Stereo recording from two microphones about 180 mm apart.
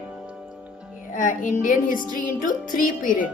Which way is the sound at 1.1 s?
45° left (ahead or behind).